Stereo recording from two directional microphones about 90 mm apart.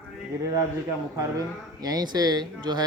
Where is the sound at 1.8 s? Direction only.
45° right (ahead or behind).